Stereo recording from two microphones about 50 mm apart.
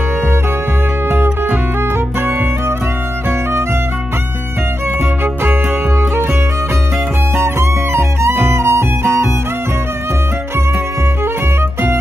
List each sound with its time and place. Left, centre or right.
5.2 s music: right
7.3 s music: right